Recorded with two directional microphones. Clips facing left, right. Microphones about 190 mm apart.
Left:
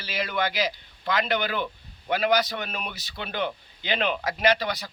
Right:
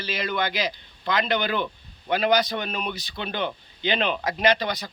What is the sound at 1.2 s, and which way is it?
Speech, 25° right (ahead or behind).